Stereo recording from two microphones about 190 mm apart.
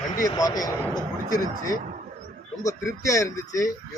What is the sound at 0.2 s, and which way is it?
Speech, 20° left (ahead or behind).